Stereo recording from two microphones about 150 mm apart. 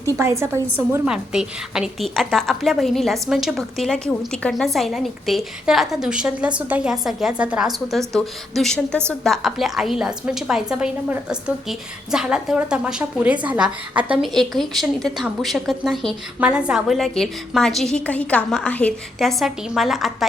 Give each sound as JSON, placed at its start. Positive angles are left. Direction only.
{"t": 0.2, "sound": "a woman's voice", "side_deg": -20}
{"t": 1.0, "sound": "a woman's voice", "side_deg": -5}
{"t": 14.2, "sound": "a woman's voice", "side_deg": 0}